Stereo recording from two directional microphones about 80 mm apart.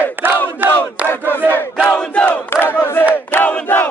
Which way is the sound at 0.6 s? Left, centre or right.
Right.